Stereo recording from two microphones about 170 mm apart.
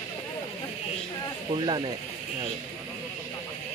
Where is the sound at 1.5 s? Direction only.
25° right (ahead or behind).